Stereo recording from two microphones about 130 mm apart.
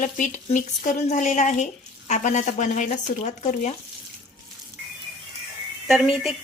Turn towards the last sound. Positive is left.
turn(degrees=0)  # may be behind; listen again after turning